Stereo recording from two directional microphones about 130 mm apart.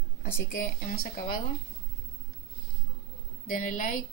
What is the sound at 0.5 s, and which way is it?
Speech, 90° left.